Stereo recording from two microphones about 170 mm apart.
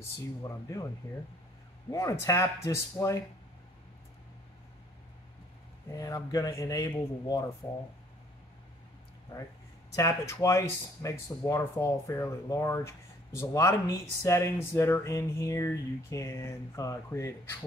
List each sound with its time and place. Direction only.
0.4 s speech: 20° left (ahead or behind)
1.9 s speech: 20° left (ahead or behind)
5.9 s speech: 20° left (ahead or behind)
9.9 s speech: 20° left (ahead or behind)